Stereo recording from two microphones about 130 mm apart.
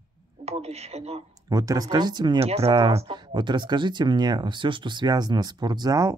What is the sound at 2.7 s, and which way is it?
Speech, 40° right (ahead or behind).